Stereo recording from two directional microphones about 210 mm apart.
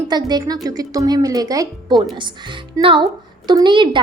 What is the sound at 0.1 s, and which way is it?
A woman's voice, 20° right (ahead or behind).